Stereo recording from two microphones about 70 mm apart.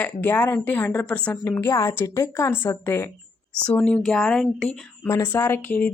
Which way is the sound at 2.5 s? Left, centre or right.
Left.